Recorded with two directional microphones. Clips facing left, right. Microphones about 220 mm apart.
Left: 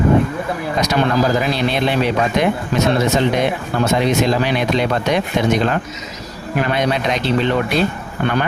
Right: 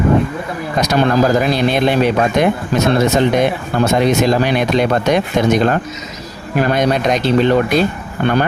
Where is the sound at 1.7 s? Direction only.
50° right (ahead or behind).